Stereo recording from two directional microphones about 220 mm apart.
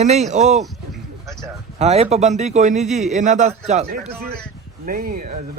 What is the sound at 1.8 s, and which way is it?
Speech, 30° right (ahead or behind).